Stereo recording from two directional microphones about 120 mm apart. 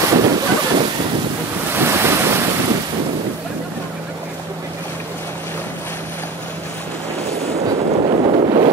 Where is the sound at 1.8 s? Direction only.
20° right (ahead or behind).